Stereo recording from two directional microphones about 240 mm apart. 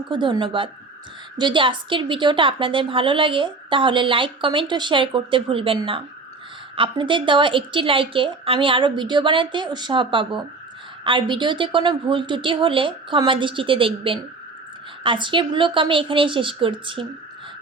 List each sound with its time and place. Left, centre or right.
0.1 s a woman's voice: centre